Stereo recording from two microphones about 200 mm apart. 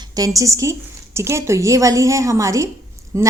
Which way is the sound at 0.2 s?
15° right (ahead or behind).